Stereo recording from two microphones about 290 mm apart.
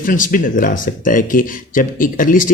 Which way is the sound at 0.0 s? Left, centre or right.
Left.